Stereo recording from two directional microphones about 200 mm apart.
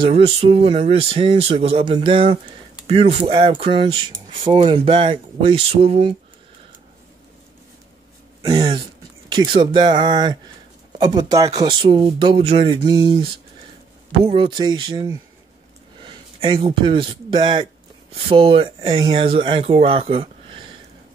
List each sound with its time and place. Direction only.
0.0 s speech: 30° right (ahead or behind)
8.4 s speech: 20° right (ahead or behind)
14.2 s a man's voice: 25° right (ahead or behind)